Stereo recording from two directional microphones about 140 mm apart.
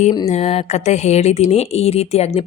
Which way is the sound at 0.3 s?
50° left (ahead or behind).